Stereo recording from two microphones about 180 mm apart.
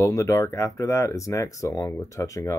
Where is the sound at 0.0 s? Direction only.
15° left (ahead or behind).